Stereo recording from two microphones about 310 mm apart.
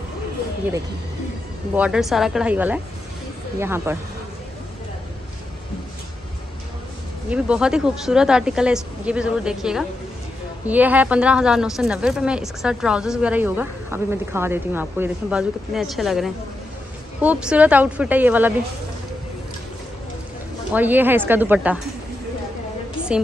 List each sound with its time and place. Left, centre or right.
1.8 s a woman's voice: centre
7.2 s a woman's voice: centre
20.7 s a woman's voice: centre